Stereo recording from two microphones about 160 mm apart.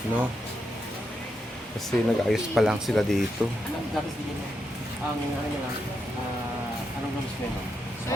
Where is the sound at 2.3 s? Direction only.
Centre (ahead or behind).